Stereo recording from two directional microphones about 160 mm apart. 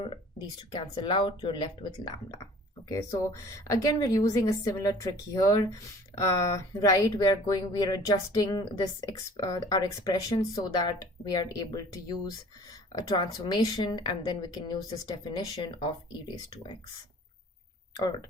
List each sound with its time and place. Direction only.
0.7 s speech: 30° left (ahead or behind)